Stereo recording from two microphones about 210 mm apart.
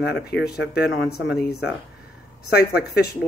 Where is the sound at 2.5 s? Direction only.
50° left (ahead or behind).